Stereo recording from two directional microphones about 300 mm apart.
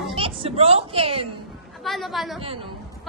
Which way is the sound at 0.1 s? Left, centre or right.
Centre.